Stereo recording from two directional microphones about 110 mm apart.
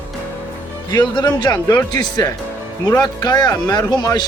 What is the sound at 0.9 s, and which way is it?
Speech, 40° left (ahead or behind).